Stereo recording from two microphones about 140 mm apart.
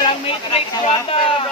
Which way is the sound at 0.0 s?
40° left (ahead or behind).